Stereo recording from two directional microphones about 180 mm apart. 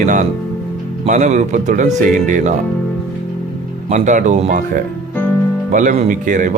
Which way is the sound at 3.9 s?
40° right (ahead or behind).